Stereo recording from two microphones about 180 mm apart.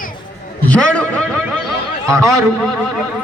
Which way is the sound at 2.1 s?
15° right (ahead or behind).